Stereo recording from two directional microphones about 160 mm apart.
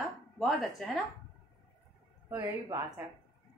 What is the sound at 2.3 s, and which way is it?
Speech, 20° right (ahead or behind).